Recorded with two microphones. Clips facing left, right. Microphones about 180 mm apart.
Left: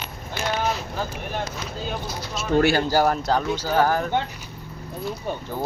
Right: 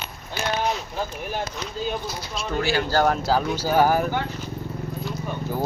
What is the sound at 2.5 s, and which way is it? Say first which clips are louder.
Speech: left 5 dB; 45° left (ahead or behind).